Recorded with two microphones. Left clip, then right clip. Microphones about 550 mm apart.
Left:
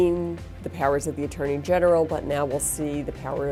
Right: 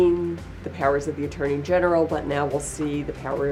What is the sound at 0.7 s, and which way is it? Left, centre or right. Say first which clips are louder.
Speech: right 1 dB; left.